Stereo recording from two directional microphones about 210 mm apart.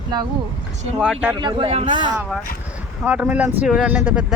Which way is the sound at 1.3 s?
25° right (ahead or behind).